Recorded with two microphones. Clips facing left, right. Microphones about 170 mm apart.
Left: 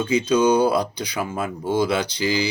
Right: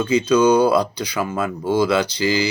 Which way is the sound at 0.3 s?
85° right.